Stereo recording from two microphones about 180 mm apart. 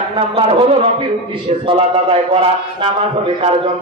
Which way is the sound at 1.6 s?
30° right (ahead or behind).